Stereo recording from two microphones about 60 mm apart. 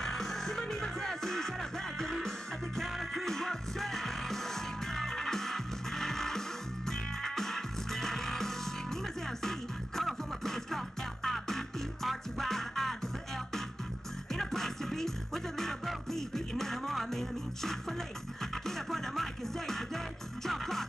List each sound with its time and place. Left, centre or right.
0.0 s music: centre
14.3 s music: centre